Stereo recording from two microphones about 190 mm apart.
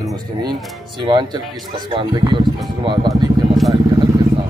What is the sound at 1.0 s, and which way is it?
Speech, 25° right (ahead or behind).